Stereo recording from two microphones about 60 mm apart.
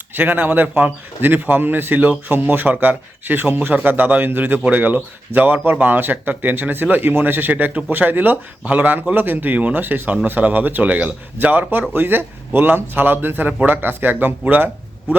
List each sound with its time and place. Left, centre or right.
0.1 s speech: right